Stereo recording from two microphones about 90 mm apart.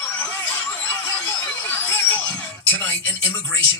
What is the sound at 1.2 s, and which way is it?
Speech, 20° left (ahead or behind).